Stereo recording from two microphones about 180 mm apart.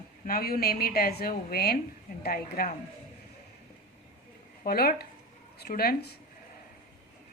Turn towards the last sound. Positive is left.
turn(degrees=60)  # may be behind; listen again after turning